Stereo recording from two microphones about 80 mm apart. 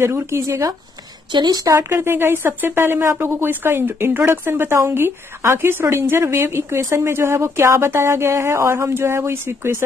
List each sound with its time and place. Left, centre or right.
0.0 s speech: right
1.3 s speech: right
1.8 s speech: right